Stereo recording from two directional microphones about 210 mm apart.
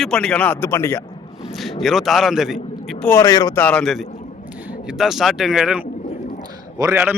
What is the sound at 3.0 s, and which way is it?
Speech, 15° left (ahead or behind).